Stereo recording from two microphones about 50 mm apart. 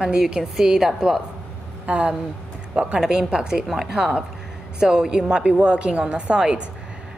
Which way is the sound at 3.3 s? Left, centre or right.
Centre.